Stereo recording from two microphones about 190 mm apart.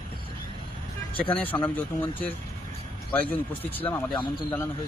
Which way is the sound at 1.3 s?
10° left (ahead or behind).